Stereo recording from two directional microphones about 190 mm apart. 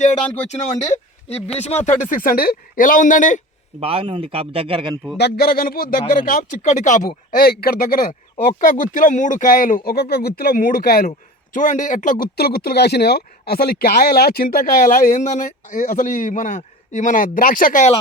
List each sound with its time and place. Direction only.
0.0 s speech: 40° left (ahead or behind)
3.8 s a man's voice: 30° right (ahead or behind)
5.1 s speech: 55° left (ahead or behind); by 7.1 s 40° left (ahead or behind)
7.3 s speech: 50° left (ahead or behind)
11.5 s speech: 40° left (ahead or behind)
12.2 s speech: 55° left (ahead or behind)